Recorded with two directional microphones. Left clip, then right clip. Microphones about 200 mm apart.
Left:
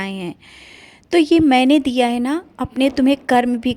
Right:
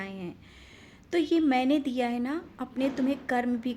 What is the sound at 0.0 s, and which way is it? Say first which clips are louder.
A woman's voice: left 12 dB; 50° left (ahead or behind).